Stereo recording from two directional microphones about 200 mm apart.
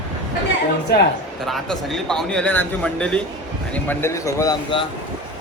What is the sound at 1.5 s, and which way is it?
A man's voice, centre (ahead or behind).